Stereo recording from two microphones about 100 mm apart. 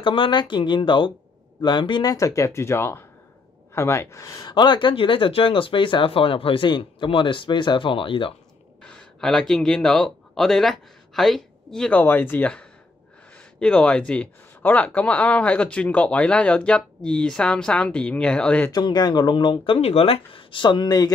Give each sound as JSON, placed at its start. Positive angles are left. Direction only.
{"t": 0.0, "sound": "speech", "side_deg": 60}
{"t": 4.5, "sound": "speech", "side_deg": 50}
{"t": 8.8, "sound": "speech", "side_deg": 5}
{"t": 12.0, "sound": "speech", "side_deg": 20}
{"t": 18.7, "sound": "speech", "side_deg": 45}